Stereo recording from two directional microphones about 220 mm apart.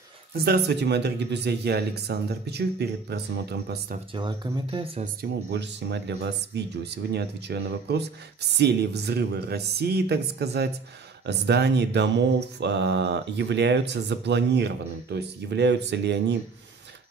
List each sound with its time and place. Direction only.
0.3 s speech: 50° right (ahead or behind)
4.1 s speech: 20° right (ahead or behind)
5.0 s speech: 50° right (ahead or behind)